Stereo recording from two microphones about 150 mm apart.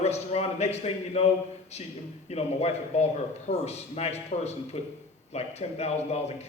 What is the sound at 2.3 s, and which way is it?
Speech, 45° left (ahead or behind).